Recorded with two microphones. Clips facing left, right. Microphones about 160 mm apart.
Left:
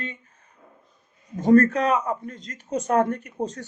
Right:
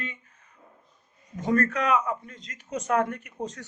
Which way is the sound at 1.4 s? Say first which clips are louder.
Left 8 dB; 30° left (ahead or behind).